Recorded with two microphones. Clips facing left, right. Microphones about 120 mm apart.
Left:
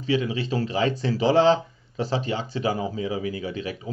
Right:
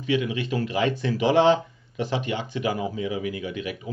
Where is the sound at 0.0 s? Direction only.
35° left (ahead or behind).